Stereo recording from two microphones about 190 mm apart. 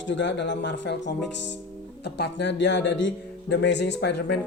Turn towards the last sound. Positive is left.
turn(degrees=60)  # may be behind; listen again after turning